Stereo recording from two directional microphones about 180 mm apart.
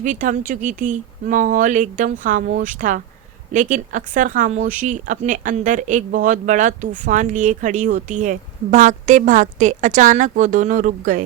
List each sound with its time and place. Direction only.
0.0 s speech: 45° right (ahead or behind)